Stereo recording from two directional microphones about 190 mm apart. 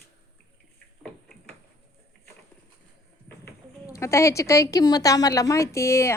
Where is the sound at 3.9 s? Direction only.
15° left (ahead or behind).